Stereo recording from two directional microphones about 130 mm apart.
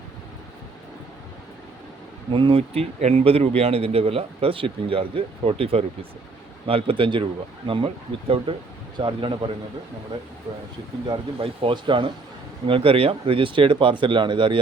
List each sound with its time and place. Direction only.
2.3 s speech: 45° right (ahead or behind)
11.1 s speech: 45° right (ahead or behind)